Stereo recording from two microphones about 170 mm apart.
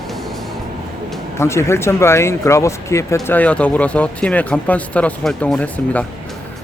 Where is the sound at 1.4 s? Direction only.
15° left (ahead or behind).